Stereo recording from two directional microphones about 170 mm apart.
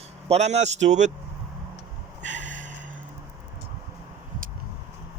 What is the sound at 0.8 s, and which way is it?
Speech, 45° right (ahead or behind).